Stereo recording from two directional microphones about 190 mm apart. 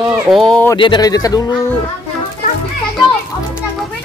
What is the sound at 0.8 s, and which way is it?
Speech, 20° left (ahead or behind).